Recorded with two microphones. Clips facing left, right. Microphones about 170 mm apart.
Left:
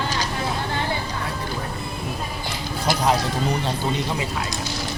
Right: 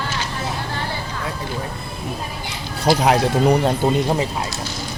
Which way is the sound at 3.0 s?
65° right (ahead or behind).